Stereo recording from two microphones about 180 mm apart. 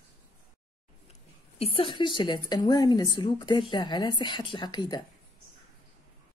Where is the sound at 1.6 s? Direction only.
30° left (ahead or behind).